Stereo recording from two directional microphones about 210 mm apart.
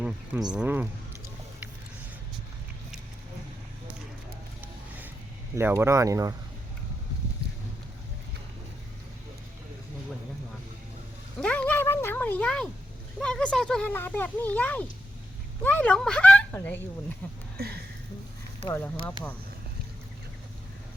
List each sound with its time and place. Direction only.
0.0 s speech: 5° right (ahead or behind)
5.5 s speech: 10° right (ahead or behind)
11.3 s speech: 5° left (ahead or behind)
17.6 s speech: 50° right (ahead or behind)
18.7 s speech: 10° left (ahead or behind)